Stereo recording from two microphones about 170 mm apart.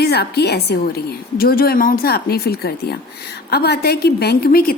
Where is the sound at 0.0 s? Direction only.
70° left (ahead or behind).